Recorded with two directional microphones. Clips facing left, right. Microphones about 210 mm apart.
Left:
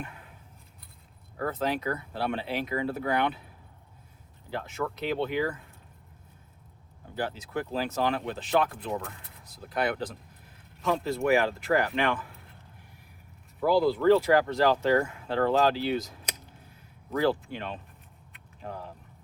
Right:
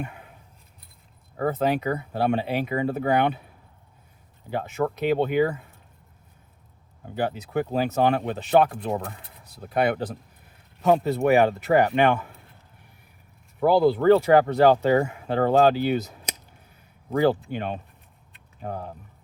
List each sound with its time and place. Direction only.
0.0 s scissors: 65° right (ahead or behind)
1.4 s speech: 60° right (ahead or behind)
4.5 s speech: 60° right (ahead or behind)
7.0 s speech: 60° right (ahead or behind)
13.6 s speech: 60° right (ahead or behind)